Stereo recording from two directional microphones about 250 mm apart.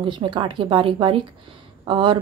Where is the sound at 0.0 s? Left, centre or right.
Centre.